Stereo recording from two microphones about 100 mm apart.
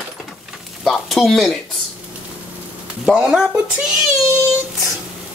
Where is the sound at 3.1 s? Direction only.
5° right (ahead or behind).